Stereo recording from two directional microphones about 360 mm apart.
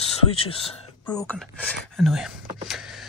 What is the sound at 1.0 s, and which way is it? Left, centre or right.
Speech, centre.